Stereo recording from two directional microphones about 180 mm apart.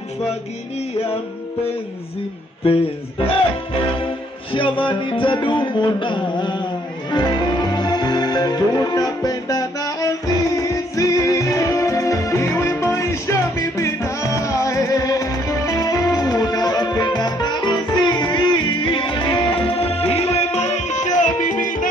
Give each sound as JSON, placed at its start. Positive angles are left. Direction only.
{"t": 2.6, "sound": "speech", "side_deg": 35}
{"t": 4.0, "sound": "music", "side_deg": 30}